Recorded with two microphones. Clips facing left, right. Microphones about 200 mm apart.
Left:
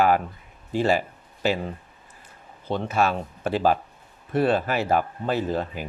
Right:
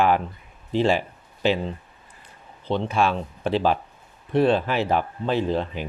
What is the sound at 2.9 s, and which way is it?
Speech, 45° left (ahead or behind).